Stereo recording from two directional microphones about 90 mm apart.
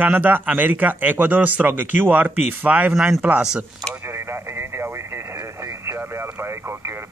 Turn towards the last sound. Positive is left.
turn(degrees=-30)  # may be behind; listen again after turning